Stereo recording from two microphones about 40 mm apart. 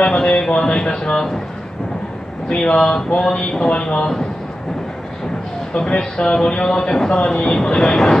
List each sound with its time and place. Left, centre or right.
0.0 s speech: left
2.5 s speech: left
5.8 s speech: left
6.3 s speech: left